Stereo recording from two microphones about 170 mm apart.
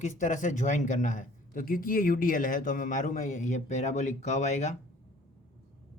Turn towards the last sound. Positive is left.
turn(degrees=45)  # may be behind; listen again after turning